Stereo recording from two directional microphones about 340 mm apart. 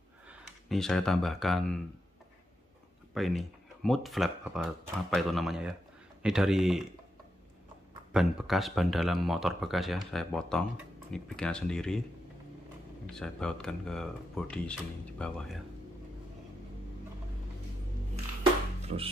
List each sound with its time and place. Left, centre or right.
0.3 s speech: centre
3.2 s speech: centre
8.1 s speech: centre
13.1 s speech: centre
18.4 s music: centre